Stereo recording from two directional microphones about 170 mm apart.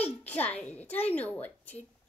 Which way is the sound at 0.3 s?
10° left (ahead or behind).